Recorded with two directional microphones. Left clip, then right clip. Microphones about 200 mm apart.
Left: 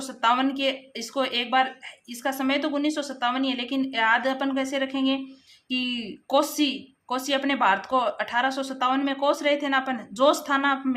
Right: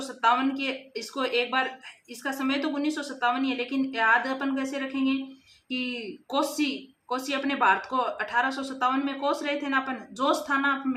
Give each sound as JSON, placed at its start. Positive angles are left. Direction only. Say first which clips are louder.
{"t": 0.0, "sound": "speech", "louder": "left 1 dB", "side_deg": 50}